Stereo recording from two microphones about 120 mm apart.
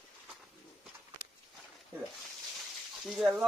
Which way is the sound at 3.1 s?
Centre (ahead or behind).